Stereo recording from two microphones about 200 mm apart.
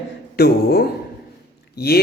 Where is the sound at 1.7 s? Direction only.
50° left (ahead or behind).